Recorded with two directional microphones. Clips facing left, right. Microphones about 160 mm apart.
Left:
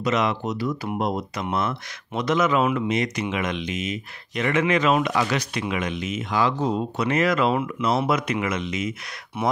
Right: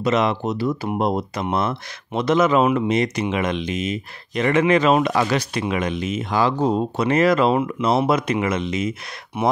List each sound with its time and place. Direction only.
0.0 s speech: 30° right (ahead or behind)